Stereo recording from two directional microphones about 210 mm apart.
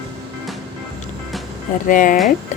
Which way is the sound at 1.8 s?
40° left (ahead or behind).